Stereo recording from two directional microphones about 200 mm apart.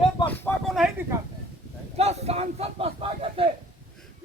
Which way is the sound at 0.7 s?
5° right (ahead or behind).